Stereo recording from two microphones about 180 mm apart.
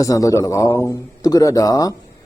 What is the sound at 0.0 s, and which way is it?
A man's voice, 20° left (ahead or behind).